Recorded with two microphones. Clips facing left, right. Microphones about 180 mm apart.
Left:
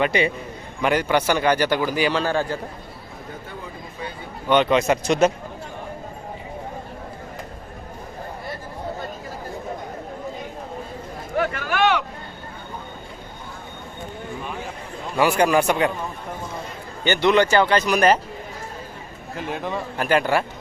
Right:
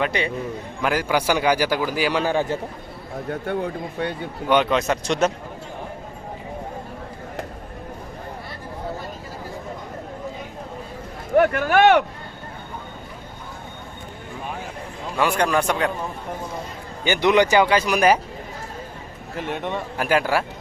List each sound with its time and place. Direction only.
0.0 s a man's voice: 5° left (ahead or behind)
2.1 s speech: 15° right (ahead or behind)
3.2 s a man's voice: 70° right (ahead or behind)
4.4 s a man's voice: 5° right (ahead or behind)
11.3 s speech: 55° right (ahead or behind)
15.2 s a man's voice: 5° left (ahead or behind)
17.0 s speech: 10° right (ahead or behind)
19.4 s a man's voice: centre (ahead or behind)